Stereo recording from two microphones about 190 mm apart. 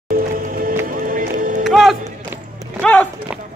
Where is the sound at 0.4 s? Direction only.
50° right (ahead or behind).